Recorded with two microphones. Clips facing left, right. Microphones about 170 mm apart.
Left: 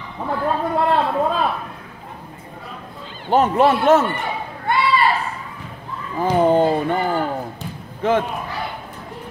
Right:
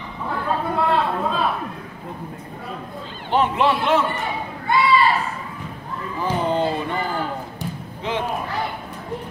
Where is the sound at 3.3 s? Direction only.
40° left (ahead or behind).